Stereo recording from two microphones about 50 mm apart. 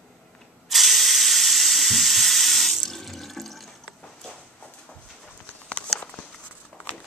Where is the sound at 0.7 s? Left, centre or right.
Centre.